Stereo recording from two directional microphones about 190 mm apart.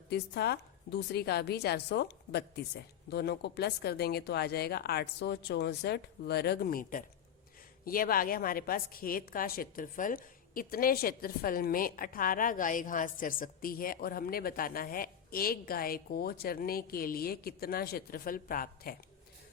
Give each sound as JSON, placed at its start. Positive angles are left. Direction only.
{"t": 0.1, "sound": "a woman's voice", "side_deg": 60}